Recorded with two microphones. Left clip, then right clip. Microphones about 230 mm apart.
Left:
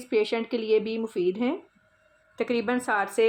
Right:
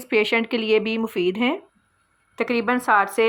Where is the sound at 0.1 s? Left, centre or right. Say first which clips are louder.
Right 5 dB; centre.